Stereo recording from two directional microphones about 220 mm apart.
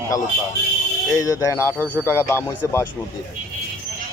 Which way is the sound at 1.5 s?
10° left (ahead or behind).